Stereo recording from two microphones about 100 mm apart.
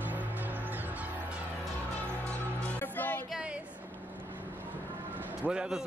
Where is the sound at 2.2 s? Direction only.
15° left (ahead or behind).